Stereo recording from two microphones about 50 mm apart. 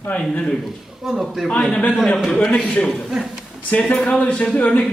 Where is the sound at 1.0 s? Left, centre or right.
Centre.